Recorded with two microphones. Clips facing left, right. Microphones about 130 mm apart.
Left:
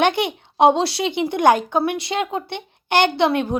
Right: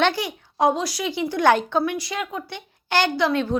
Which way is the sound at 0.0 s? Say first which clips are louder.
Left 3 dB; 25° left (ahead or behind).